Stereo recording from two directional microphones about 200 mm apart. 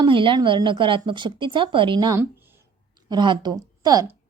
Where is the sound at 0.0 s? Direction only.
25° right (ahead or behind).